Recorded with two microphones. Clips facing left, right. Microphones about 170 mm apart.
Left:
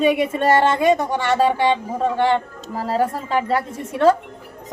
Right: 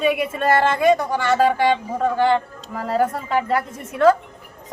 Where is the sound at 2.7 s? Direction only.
30° left (ahead or behind).